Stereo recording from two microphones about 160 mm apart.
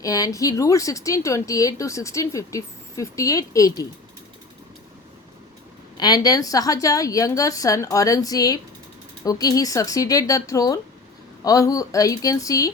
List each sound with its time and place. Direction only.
0.0 s speech: 20° left (ahead or behind)
6.0 s speech: 25° left (ahead or behind)